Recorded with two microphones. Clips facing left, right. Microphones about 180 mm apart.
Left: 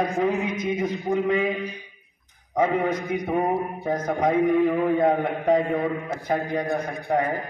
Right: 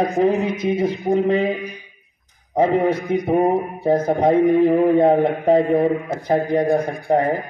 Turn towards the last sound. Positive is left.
turn(degrees=-30)  # may be behind; listen again after turning